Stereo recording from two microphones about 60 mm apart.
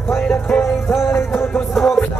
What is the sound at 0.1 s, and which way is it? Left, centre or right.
Music, left.